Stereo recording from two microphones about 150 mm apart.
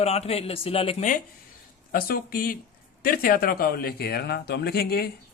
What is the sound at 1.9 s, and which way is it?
Speech, 80° left.